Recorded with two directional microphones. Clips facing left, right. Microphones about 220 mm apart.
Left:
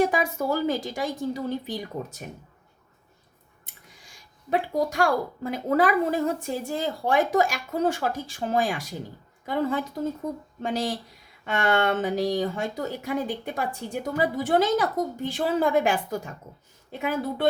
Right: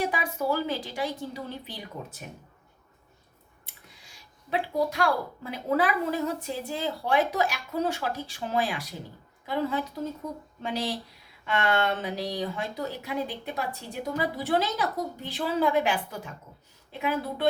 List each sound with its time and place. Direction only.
0.0 s speech: 45° left (ahead or behind)
4.4 s speech: 45° left (ahead or behind)